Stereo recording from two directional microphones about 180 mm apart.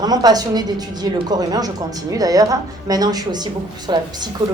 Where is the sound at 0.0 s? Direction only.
20° right (ahead or behind).